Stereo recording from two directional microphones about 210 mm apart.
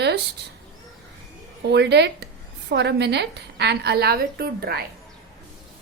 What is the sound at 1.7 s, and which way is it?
A woman's voice, 55° right (ahead or behind).